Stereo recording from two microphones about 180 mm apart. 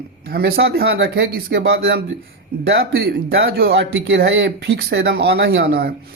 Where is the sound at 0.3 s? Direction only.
60° right (ahead or behind).